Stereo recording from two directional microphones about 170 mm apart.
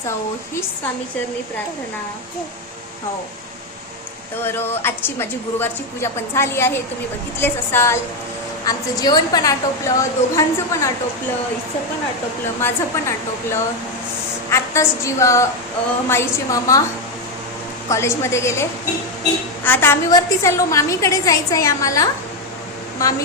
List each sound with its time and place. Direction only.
4.4 s a woman's voice: 15° left (ahead or behind)
12.6 s a woman's voice: 15° left (ahead or behind)
17.8 s a woman's voice: 15° left (ahead or behind)